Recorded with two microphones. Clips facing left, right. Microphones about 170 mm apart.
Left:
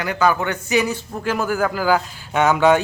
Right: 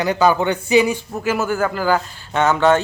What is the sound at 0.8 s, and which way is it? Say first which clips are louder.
A man's voice: right 3 dB; 10° right (ahead or behind).